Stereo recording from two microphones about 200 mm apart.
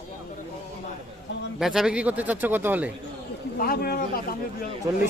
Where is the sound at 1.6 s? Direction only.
Centre (ahead or behind).